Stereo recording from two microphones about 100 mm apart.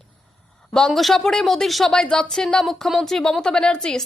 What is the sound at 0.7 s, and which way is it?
Speech, 5° left (ahead or behind).